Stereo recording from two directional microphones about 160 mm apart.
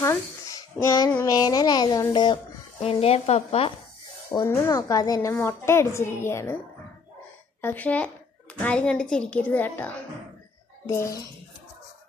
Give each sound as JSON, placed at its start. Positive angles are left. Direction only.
{"t": 0.0, "sound": "a sound", "side_deg": 20}
{"t": 1.2, "sound": "a woman's voice", "side_deg": 25}
{"t": 2.8, "sound": "speech", "side_deg": 40}
{"t": 4.3, "sound": "a woman's voice", "side_deg": 25}
{"t": 7.6, "sound": "a woman's voice", "side_deg": 10}